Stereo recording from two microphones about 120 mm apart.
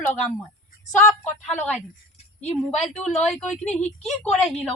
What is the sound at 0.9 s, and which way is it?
Speech, 25° left (ahead or behind).